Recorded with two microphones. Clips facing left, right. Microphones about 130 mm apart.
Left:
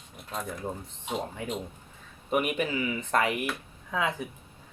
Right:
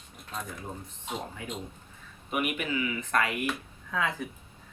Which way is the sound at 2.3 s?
35° left (ahead or behind).